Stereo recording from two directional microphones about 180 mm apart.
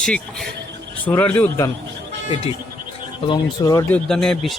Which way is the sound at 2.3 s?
30° left (ahead or behind).